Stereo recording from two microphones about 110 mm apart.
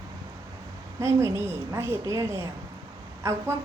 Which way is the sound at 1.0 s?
25° right (ahead or behind).